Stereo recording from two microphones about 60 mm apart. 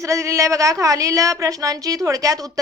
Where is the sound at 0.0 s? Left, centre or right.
Right.